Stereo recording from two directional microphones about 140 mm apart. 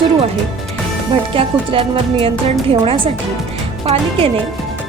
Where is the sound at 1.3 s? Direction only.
40° right (ahead or behind).